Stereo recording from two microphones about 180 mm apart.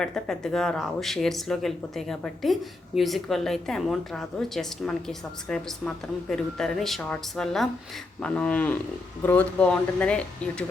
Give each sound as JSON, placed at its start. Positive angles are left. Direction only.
{"t": 0.0, "sound": "speech", "side_deg": 5}